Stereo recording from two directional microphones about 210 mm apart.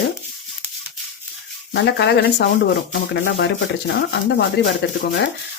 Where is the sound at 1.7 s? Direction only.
55° left (ahead or behind).